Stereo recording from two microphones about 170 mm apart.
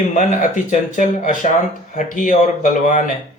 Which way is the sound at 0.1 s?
45° left (ahead or behind).